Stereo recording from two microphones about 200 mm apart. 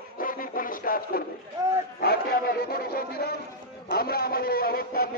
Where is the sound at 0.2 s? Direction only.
45° left (ahead or behind).